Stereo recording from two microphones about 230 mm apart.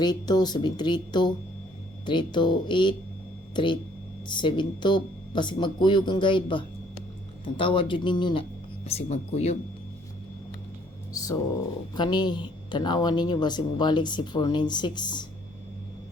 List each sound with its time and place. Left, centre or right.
0.0 s speech: centre
11.1 s speech: centre